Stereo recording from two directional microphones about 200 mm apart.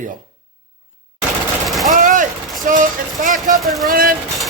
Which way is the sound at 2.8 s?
40° right (ahead or behind).